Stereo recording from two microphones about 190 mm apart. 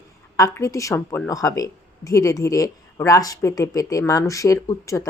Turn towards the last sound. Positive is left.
turn(degrees=15)  # may be behind; listen again after turning